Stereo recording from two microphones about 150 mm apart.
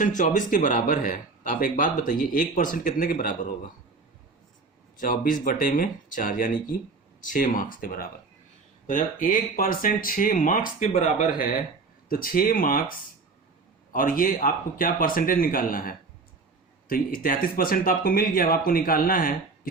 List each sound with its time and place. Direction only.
0.0 s speech: 60° left (ahead or behind)
4.9 s speech: 65° left (ahead or behind)
8.9 s speech: 60° left (ahead or behind)
13.9 s speech: 65° left (ahead or behind)